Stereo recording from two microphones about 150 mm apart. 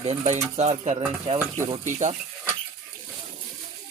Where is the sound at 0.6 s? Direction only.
45° right (ahead or behind).